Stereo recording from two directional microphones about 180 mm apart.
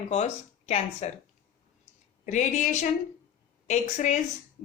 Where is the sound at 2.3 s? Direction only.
40° left (ahead or behind).